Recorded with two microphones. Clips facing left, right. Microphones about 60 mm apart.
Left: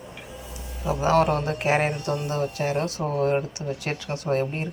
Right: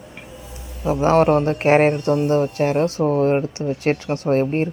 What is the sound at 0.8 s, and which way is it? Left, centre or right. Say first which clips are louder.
Speech: right 5 dB; right.